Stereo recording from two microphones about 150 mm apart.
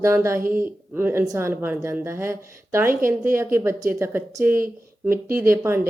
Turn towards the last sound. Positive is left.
turn(degrees=-20)  # may be behind; listen again after turning